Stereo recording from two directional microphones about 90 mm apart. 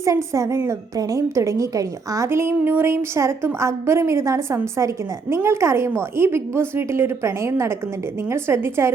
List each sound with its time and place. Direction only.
0.3 s a woman's voice: 35° right (ahead or behind)